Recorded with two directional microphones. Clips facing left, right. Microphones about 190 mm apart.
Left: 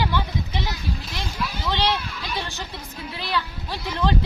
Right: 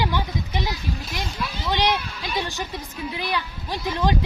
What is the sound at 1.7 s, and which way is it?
A child's voice, 15° right (ahead or behind).